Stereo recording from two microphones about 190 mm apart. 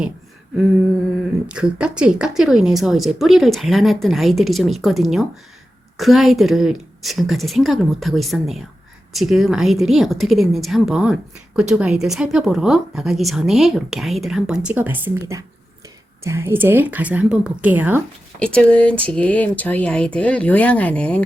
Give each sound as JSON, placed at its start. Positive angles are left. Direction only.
{"t": 1.5, "sound": "a woman's voice", "side_deg": -5}
{"t": 18.3, "sound": "speech", "side_deg": 5}